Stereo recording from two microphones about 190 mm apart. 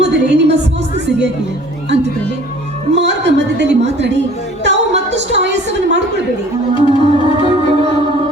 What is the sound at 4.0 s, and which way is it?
Speech, 65° right (ahead or behind).